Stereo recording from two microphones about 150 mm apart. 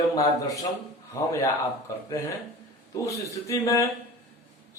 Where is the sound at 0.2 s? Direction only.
25° left (ahead or behind).